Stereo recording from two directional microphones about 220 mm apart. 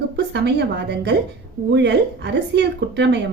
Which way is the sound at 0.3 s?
50° right (ahead or behind).